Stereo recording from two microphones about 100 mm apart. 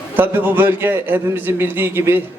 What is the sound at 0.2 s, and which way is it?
A man's voice, 20° right (ahead or behind).